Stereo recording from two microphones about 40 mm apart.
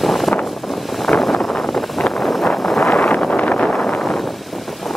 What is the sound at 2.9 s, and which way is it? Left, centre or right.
Vehicle, left.